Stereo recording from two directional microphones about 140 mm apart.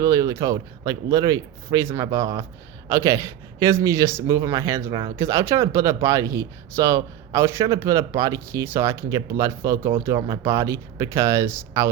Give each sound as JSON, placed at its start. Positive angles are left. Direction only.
{"t": 0.0, "sound": "speech", "side_deg": -25}
{"t": 4.9, "sound": "speech", "side_deg": -35}
{"t": 5.1, "sound": "speech", "side_deg": -20}